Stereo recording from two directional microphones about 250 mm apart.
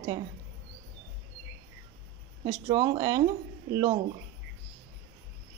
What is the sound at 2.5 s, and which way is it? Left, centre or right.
Speech, centre.